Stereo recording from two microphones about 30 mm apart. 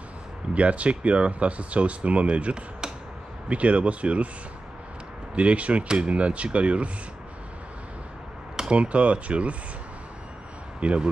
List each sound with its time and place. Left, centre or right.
0.6 s speech: right
5.3 s speech: right
8.7 s speech: right
10.8 s speech: right